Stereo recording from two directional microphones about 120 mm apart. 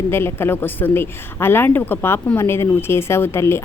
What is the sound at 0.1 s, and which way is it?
Speech, 20° left (ahead or behind).